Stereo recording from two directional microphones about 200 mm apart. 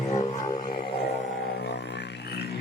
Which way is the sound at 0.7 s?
50° left (ahead or behind).